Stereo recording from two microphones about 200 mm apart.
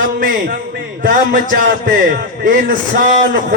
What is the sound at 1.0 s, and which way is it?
A man's voice, 45° right (ahead or behind).